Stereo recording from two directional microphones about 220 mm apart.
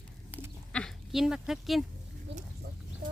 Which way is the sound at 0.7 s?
Centre (ahead or behind).